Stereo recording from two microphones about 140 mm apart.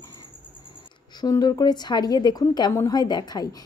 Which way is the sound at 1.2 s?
25° left (ahead or behind).